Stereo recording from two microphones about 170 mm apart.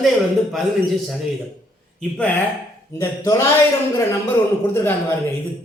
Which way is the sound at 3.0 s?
15° left (ahead or behind).